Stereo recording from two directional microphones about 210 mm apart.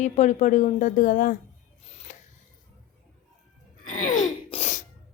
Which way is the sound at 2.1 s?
35° left (ahead or behind).